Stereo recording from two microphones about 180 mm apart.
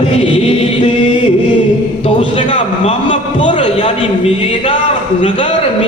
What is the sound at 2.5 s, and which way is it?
A man's voice, 30° left (ahead or behind).